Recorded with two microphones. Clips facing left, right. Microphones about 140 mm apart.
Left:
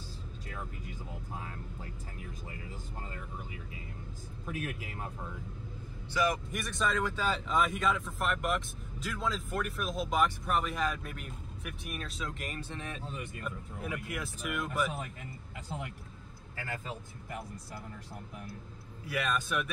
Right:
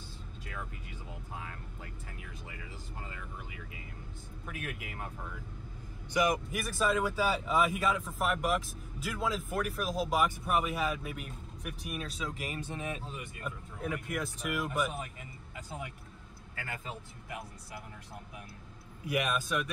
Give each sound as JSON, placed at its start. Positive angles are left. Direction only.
{"t": 1.4, "sound": "speech", "side_deg": 35}
{"t": 4.5, "sound": "speech", "side_deg": 30}
{"t": 6.1, "sound": "speech", "side_deg": -15}
{"t": 6.5, "sound": "speech", "side_deg": -5}
{"t": 12.5, "sound": "speech", "side_deg": -10}
{"t": 13.7, "sound": "speech", "side_deg": 5}
{"t": 19.0, "sound": "speech", "side_deg": -15}
{"t": 19.4, "sound": "speech", "side_deg": 5}